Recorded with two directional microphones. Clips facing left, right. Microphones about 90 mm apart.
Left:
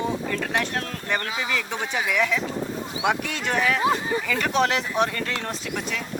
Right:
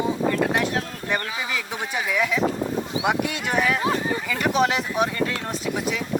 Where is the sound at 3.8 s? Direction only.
20° left (ahead or behind).